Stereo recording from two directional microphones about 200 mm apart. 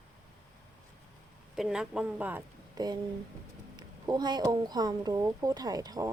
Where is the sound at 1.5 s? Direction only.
5° right (ahead or behind).